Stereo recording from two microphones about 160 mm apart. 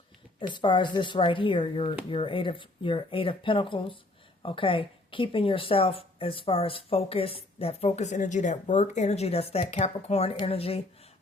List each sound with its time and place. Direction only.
0.3 s speech: 30° left (ahead or behind)